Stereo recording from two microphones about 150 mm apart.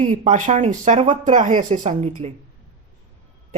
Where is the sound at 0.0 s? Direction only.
55° right (ahead or behind).